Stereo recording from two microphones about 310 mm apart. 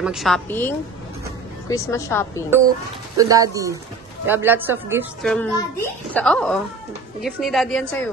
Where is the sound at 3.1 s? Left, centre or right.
Centre.